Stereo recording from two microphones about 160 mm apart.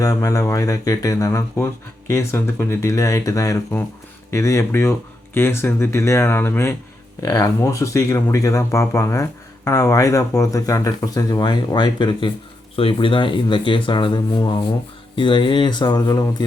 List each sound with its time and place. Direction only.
0.0 s speech: 20° left (ahead or behind)